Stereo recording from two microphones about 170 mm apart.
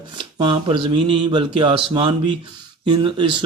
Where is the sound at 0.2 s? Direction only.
25° right (ahead or behind).